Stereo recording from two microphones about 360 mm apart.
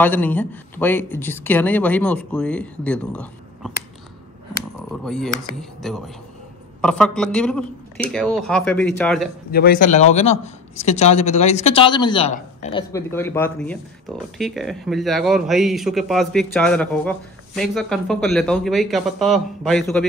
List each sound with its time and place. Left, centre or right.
0.0 s speech: centre
4.8 s speech: centre
9.5 s speech: left; by 20.1 s centre